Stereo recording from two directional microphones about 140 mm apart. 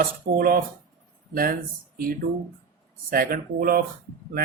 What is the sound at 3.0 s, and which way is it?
Speech, 90° right.